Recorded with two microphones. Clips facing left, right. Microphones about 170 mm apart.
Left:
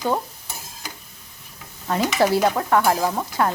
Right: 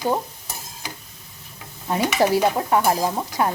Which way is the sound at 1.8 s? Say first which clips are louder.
Even; 15° right (ahead or behind).